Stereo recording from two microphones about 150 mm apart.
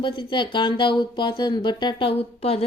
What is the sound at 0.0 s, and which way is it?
Speech, 35° left (ahead or behind).